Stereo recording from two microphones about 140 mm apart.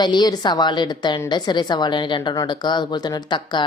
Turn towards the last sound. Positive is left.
turn(degrees=30)  # may be behind; listen again after turning